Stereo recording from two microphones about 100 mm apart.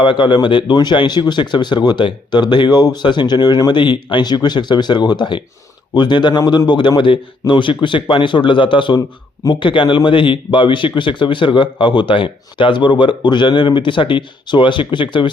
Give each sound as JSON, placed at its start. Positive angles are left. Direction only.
{"t": 0.0, "sound": "a man's voice", "side_deg": 55}
{"t": 9.0, "sound": "speech", "side_deg": 40}
{"t": 9.6, "sound": "a man's voice", "side_deg": 55}